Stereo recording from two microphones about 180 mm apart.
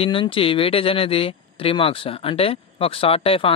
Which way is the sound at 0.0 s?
30° left (ahead or behind).